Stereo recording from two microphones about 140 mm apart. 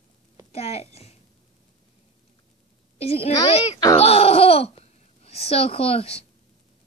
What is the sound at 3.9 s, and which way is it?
A child's voice, 45° left (ahead or behind).